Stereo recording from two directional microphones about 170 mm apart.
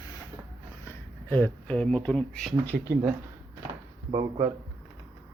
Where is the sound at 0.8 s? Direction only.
10° left (ahead or behind).